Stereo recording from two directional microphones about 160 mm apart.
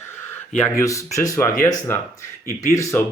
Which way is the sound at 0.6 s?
20° left (ahead or behind).